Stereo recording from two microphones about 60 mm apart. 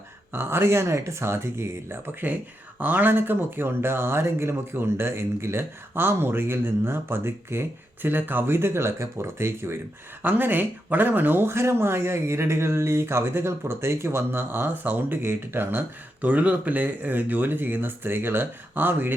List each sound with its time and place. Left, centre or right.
0.3 s speech: right
2.8 s speech: right
10.2 s speech: right
16.2 s speech: right